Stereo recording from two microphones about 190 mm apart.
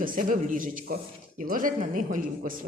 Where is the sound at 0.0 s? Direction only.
45° right (ahead or behind).